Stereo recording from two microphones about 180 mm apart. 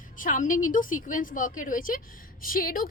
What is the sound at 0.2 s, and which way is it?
A woman's voice, 45° left (ahead or behind).